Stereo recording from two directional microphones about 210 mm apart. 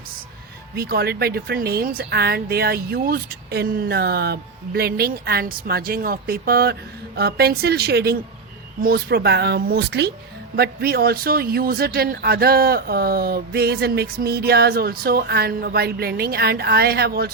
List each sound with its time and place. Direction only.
0.8 s speech: 50° right (ahead or behind)